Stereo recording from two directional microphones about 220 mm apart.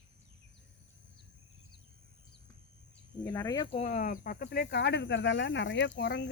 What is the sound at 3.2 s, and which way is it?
Speech, 15° left (ahead or behind).